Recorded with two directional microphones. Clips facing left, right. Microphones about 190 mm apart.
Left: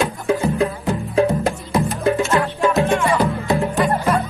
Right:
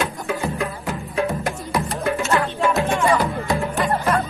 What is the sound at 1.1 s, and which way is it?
Music, 25° left (ahead or behind).